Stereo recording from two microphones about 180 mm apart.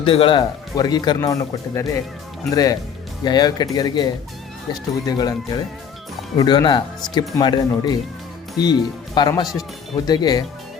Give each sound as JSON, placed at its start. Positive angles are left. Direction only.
{"t": 0.0, "sound": "speech", "side_deg": 30}